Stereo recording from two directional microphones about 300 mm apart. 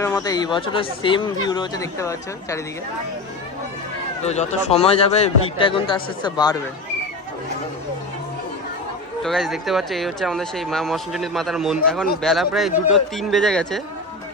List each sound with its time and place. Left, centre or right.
0.0 s speech: centre
4.2 s a man's voice: left
9.2 s speech: centre